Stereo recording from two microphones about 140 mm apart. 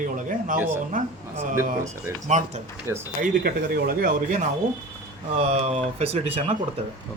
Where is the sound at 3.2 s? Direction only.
90° right.